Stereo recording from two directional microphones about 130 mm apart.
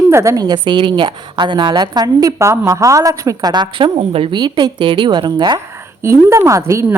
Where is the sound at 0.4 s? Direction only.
35° right (ahead or behind).